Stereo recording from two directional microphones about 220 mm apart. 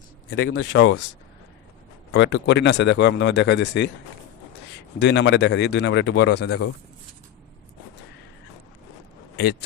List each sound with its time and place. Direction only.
0.3 s speech: 65° left (ahead or behind)
2.1 s speech: 55° left (ahead or behind)
4.9 s speech: 55° left (ahead or behind)
9.3 s speech: 50° left (ahead or behind)